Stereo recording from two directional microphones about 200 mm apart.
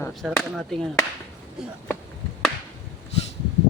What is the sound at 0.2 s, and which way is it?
Speech, centre (ahead or behind).